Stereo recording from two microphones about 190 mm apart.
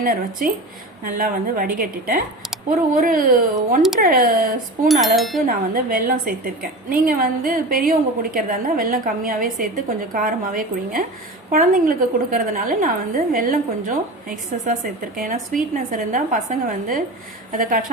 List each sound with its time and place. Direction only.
0.0 s a woman's voice: 50° right (ahead or behind)
4.9 s a sound: centre (ahead or behind)
5.5 s a woman's voice: 50° right (ahead or behind)